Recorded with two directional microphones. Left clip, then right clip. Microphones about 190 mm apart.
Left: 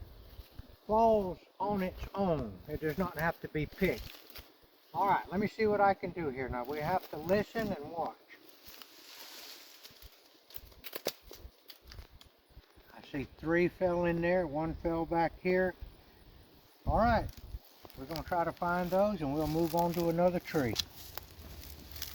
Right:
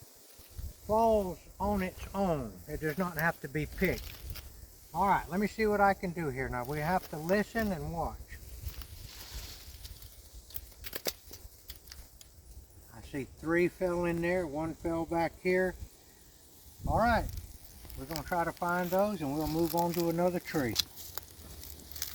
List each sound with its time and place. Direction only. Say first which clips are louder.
0.9 s speech: even; 25° right (ahead or behind)
13.1 s speech: even; 25° left (ahead or behind)
16.8 s speech: right 1 dB; 10° right (ahead or behind); by 20.7 s 10° left (ahead or behind)
21.2 s a sound: right 1 dB; 5° left (ahead or behind)